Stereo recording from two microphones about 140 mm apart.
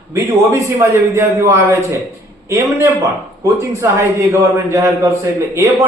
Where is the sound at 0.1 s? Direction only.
20° right (ahead or behind).